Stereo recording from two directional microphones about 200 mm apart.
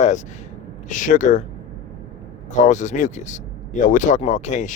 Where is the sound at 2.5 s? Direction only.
35° left (ahead or behind).